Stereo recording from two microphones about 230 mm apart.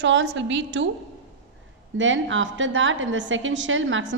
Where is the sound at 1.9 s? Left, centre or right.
Right.